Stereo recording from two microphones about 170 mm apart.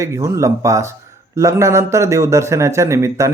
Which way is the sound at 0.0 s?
15° right (ahead or behind).